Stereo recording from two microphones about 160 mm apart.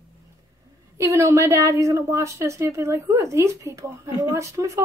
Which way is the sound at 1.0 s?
20° right (ahead or behind).